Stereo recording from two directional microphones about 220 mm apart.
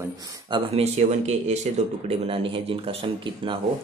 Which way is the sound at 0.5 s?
25° right (ahead or behind).